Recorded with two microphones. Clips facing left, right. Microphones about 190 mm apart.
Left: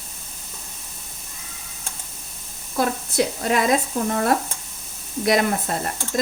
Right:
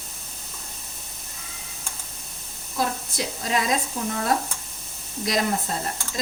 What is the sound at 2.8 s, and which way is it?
Speech, 60° left (ahead or behind).